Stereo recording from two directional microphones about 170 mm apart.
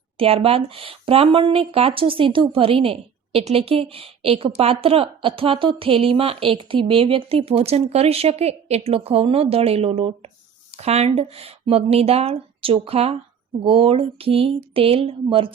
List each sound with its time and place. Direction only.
0.2 s speech: 35° right (ahead or behind)